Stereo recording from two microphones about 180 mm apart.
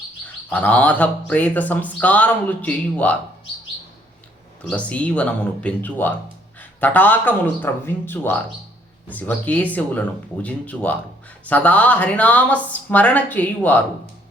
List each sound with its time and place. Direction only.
0.5 s speech: 10° left (ahead or behind)
4.7 s speech: 5° left (ahead or behind)